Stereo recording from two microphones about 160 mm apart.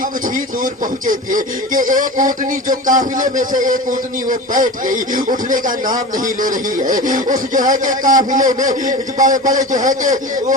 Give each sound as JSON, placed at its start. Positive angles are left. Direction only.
{"t": 0.3, "sound": "a man's voice", "side_deg": -55}